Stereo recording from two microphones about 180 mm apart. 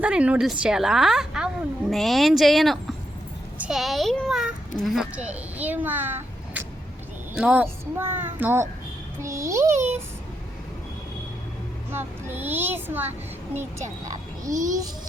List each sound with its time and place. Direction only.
0.0 s a child's voice: 5° right (ahead or behind)
9.7 s a child's voice: 40° right (ahead or behind)
11.9 s a child's voice: 10° right (ahead or behind)
14.5 s a child's voice: 45° right (ahead or behind)